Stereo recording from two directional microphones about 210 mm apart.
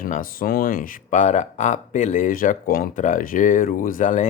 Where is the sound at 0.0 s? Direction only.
40° left (ahead or behind).